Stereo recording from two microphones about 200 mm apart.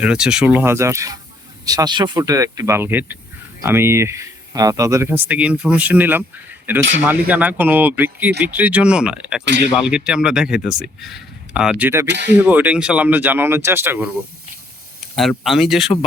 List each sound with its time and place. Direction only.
0.0 s speech: 5° right (ahead or behind)
7.3 s speech: 10° right (ahead or behind)
9.4 s speech: 60° right (ahead or behind)
9.7 s speech: 5° right (ahead or behind)
12.0 s speech: 60° right (ahead or behind)
12.5 s speech: 10° right (ahead or behind)
15.1 s speech: centre (ahead or behind)